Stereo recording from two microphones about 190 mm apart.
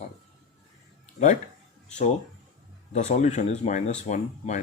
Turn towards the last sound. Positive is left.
turn(degrees=40)  # may be behind; listen again after turning